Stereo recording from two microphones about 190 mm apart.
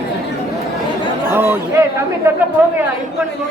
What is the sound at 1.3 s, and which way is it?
Speech, 10° right (ahead or behind).